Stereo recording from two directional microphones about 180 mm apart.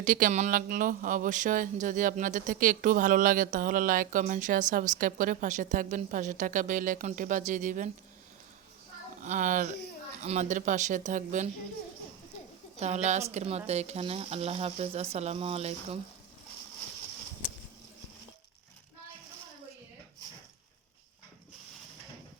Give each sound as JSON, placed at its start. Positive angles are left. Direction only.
{"t": 0.0, "sound": "speech", "side_deg": -45}
{"t": 9.2, "sound": "speech", "side_deg": -45}
{"t": 12.8, "sound": "speech", "side_deg": -40}